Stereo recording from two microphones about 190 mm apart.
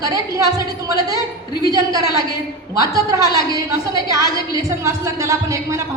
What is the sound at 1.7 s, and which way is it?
A woman's voice, 20° right (ahead or behind).